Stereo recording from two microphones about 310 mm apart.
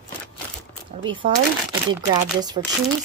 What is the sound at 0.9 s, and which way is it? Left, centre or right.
Speech, centre.